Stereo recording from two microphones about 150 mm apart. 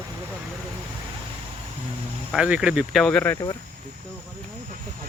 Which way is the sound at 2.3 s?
5° right (ahead or behind).